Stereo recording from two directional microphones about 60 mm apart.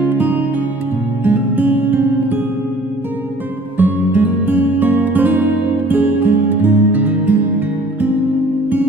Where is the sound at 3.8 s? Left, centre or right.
Right.